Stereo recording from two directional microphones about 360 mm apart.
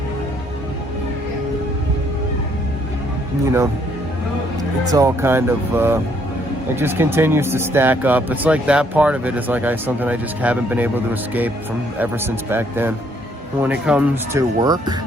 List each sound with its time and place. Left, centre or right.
4.9 s speech: centre